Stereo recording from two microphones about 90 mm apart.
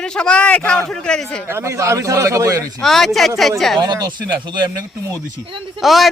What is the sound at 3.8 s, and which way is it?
Speech, 50° right (ahead or behind).